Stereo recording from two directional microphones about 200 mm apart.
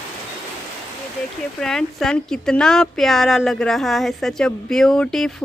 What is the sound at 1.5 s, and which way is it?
Speech, 5° left (ahead or behind).